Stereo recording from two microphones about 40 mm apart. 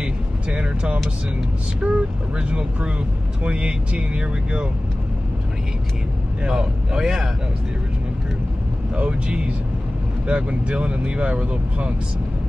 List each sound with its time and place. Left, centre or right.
0.0 s vehicle: right
1.8 s speech: right
6.4 s speech: right
8.9 s speech: right